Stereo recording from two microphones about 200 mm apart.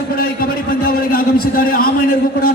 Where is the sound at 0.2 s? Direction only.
45° left (ahead or behind).